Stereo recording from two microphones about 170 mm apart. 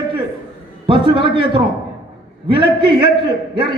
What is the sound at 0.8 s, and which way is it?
A man's voice, 30° right (ahead or behind).